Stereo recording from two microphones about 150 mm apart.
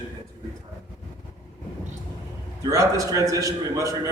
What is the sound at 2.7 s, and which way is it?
A man's voice, 20° right (ahead or behind).